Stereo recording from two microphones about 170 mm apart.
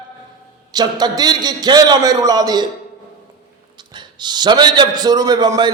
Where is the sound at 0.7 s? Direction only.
25° right (ahead or behind).